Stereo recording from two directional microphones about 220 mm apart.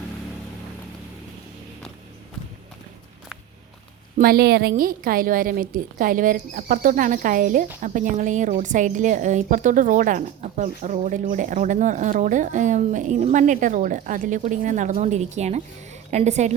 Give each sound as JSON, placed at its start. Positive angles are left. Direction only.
{"t": 4.2, "sound": "a woman's voice", "side_deg": -45}